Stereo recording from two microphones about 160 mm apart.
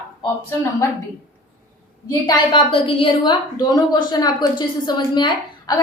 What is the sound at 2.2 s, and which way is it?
A woman's voice, 30° left (ahead or behind).